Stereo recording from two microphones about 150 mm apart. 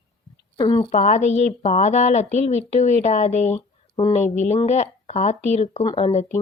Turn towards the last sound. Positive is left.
turn(degrees=35)  # may be behind; listen again after turning